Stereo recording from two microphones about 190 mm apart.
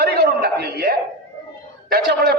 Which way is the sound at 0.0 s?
55° right (ahead or behind).